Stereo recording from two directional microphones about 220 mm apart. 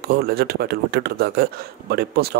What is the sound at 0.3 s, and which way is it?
A man's voice, 45° right (ahead or behind).